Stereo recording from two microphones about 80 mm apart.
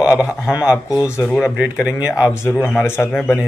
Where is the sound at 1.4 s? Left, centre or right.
Left.